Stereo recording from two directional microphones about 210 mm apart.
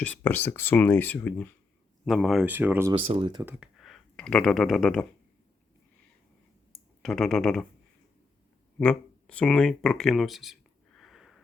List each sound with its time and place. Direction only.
0.0 s speech: 10° left (ahead or behind); by 2.9 s 10° right (ahead or behind)
3.1 s speech: 25° right (ahead or behind)
3.4 s speech: 5° right (ahead or behind)
6.7 s speech: centre (ahead or behind)
8.8 s speech: 5° left (ahead or behind)